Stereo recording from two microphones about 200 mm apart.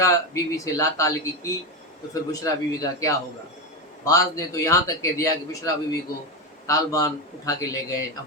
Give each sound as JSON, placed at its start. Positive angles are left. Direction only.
{"t": 0.0, "sound": "a man's voice", "side_deg": 15}